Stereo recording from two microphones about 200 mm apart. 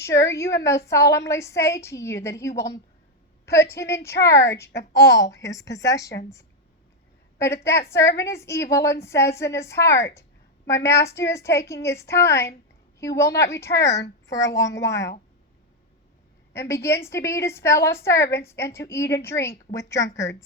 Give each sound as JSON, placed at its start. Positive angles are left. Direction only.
{"t": 0.0, "sound": "a woman's voice", "side_deg": 15}
{"t": 7.3, "sound": "a woman's voice", "side_deg": 15}
{"t": 16.5, "sound": "a woman's voice", "side_deg": 15}